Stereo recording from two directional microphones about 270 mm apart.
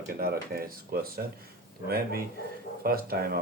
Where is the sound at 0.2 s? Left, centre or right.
Right.